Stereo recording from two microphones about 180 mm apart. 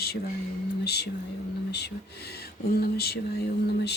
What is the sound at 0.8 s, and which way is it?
Speech, 65° left (ahead or behind).